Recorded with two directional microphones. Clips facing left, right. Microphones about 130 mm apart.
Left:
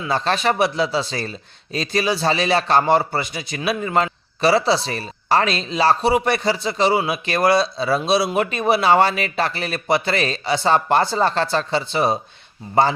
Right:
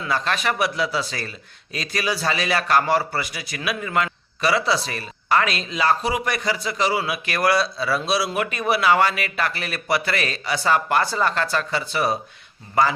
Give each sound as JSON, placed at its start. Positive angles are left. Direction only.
{"t": 0.1, "sound": "a man's voice", "side_deg": 30}